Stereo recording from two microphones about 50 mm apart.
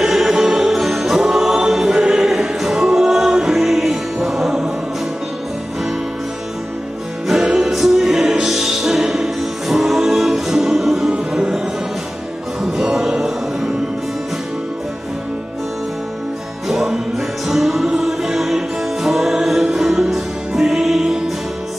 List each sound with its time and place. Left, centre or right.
0.0 s music: centre
7.5 s music: centre
11.3 s music: centre
12.7 s music: centre
16.6 s music: centre